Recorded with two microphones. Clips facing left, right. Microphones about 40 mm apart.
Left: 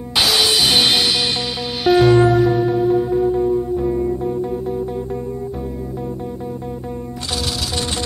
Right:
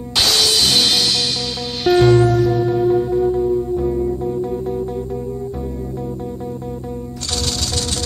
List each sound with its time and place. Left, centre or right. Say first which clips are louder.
0.1 s music: left 1 dB; centre
1.9 s music: even; centre
2.1 s music: left 1 dB; left